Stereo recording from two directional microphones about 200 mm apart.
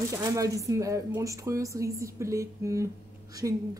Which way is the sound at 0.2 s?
15° right (ahead or behind).